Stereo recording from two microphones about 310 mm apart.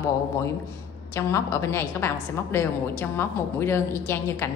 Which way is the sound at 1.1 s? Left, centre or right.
Centre.